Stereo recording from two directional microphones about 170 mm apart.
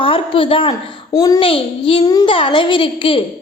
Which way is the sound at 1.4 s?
35° left (ahead or behind).